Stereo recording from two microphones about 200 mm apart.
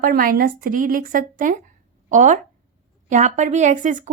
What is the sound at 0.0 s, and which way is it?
A woman's voice, 45° right (ahead or behind).